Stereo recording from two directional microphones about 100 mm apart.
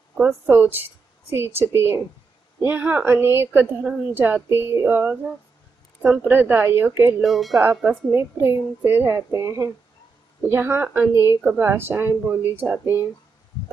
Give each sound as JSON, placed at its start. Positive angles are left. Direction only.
{"t": 0.3, "sound": "a woman's voice", "side_deg": -20}
{"t": 3.8, "sound": "a sound", "side_deg": -15}
{"t": 6.0, "sound": "a woman's voice", "side_deg": -15}
{"t": 7.2, "sound": "speech", "side_deg": 0}
{"t": 7.8, "sound": "a sound", "side_deg": -10}
{"t": 8.1, "sound": "a woman's voice", "side_deg": -25}